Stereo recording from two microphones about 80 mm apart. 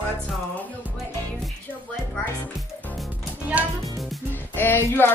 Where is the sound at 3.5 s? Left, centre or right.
Centre.